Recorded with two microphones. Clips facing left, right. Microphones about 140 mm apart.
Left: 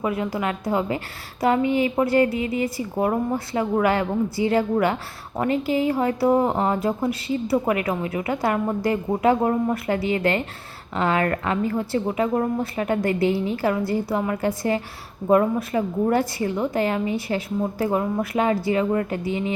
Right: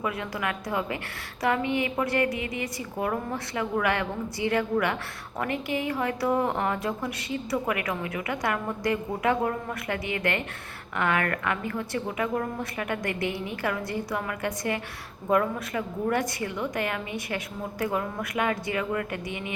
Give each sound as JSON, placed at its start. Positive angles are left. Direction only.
{"t": 0.0, "sound": "a woman's voice", "side_deg": 25}